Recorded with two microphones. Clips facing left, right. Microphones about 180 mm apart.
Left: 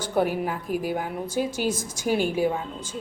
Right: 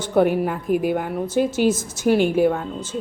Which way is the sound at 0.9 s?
5° left (ahead or behind).